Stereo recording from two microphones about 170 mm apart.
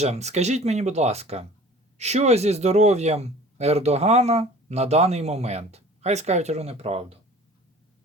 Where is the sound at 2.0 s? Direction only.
40° right (ahead or behind).